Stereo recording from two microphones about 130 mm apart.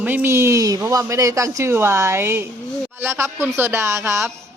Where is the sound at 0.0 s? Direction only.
15° right (ahead or behind).